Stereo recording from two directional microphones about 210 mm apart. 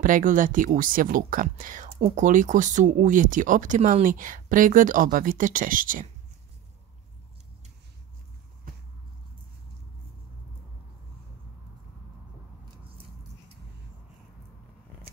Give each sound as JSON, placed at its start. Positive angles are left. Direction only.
{"t": 0.0, "sound": "speech", "side_deg": -40}